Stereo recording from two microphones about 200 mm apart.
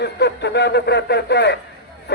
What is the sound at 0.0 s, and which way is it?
Speech, 60° left (ahead or behind).